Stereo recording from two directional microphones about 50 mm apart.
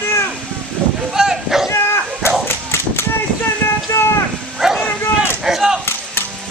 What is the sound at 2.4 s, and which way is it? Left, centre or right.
Whip, left.